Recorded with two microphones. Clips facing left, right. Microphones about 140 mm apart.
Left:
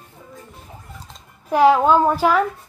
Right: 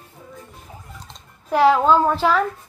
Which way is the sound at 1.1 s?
15° left (ahead or behind).